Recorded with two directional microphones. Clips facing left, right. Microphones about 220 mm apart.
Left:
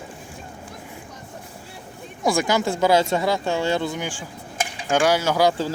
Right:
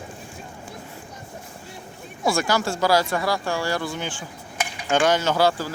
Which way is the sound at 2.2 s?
15° left (ahead or behind).